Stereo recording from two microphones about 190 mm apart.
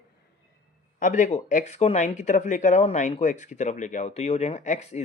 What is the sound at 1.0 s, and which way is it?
Speech, 40° left (ahead or behind).